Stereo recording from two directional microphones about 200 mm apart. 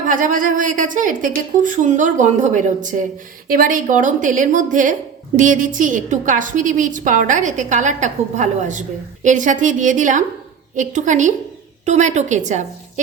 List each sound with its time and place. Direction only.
0.0 s a woman's voice: 40° right (ahead or behind)